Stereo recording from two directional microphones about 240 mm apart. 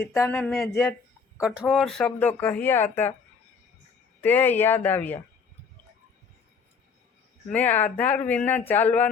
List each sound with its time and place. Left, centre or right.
0.0 s speech: centre
1.4 s speech: centre
4.2 s speech: centre
7.5 s speech: centre